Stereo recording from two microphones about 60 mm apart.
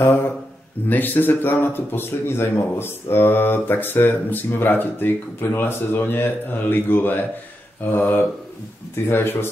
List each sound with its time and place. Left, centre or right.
0.8 s speech: left